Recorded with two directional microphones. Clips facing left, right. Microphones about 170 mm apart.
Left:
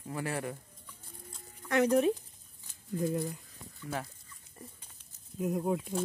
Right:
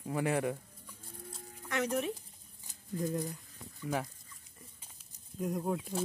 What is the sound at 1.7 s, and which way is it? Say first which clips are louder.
Speech: left 7 dB; 35° left (ahead or behind).